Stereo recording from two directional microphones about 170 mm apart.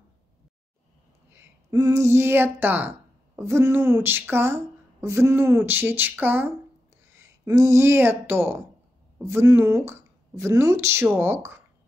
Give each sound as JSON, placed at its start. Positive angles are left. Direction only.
{"t": 1.3, "sound": "a woman's voice", "side_deg": -20}